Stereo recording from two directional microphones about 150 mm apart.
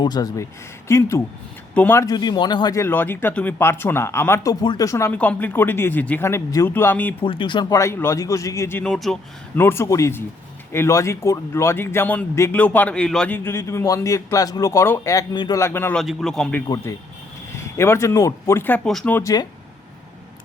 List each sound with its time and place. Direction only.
0.0 s a man's voice: 25° left (ahead or behind)
2.8 s speech: 15° left (ahead or behind)
4.6 s a man's voice: 25° left (ahead or behind)
5.1 s speech: 10° left (ahead or behind)
7.2 s a man's voice: 35° left (ahead or behind)
8.8 s a man's voice: centre (ahead or behind)
9.6 s speech: 15° left (ahead or behind)
16.0 s a man's voice: centre (ahead or behind)
16.6 s a man's voice: 25° left (ahead or behind)
18.9 s a man's voice: centre (ahead or behind)
19.1 s a man's voice: 25° left (ahead or behind)